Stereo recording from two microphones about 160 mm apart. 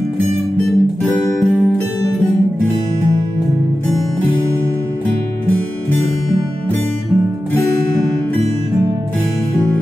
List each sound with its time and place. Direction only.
0.7 s guitar: centre (ahead or behind)